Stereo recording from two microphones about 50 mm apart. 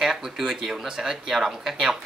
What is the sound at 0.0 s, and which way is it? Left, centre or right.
Speech, centre.